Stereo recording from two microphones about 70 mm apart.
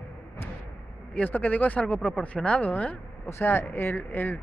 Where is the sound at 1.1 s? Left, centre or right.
Left.